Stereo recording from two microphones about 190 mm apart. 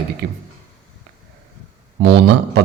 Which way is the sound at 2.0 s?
65° right (ahead or behind).